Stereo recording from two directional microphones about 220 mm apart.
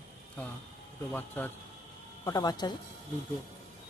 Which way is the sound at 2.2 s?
15° left (ahead or behind).